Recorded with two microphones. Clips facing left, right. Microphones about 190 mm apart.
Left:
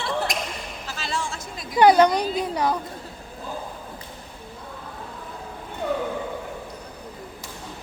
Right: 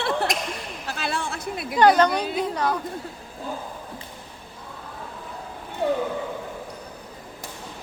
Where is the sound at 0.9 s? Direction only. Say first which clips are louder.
Right 2 dB; 60° right (ahead or behind).